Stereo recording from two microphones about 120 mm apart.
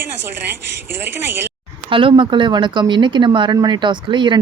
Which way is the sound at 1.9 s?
45° right (ahead or behind).